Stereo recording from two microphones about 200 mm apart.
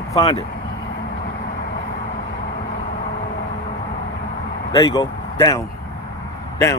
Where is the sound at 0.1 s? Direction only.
25° left (ahead or behind).